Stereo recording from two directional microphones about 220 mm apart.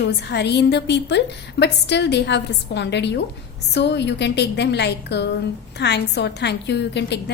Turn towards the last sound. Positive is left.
turn(degrees=50)  # may be behind; listen again after turning